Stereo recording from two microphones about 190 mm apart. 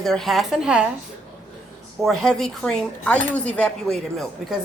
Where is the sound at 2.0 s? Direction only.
Centre (ahead or behind).